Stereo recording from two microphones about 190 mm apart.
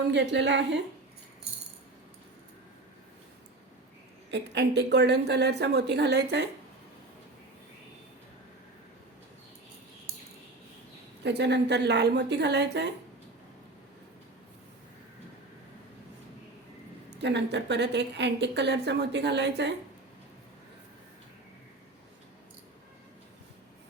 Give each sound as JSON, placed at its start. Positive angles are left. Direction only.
{"t": 0.1, "sound": "a woman's voice", "side_deg": -65}
{"t": 4.3, "sound": "a woman's voice", "side_deg": -65}
{"t": 11.2, "sound": "a woman's voice", "side_deg": -65}
{"t": 17.2, "sound": "a woman's voice", "side_deg": -65}